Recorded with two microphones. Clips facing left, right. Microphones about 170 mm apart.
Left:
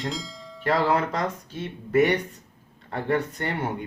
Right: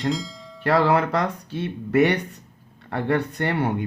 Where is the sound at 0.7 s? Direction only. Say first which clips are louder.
Right 4 dB; 65° right (ahead or behind).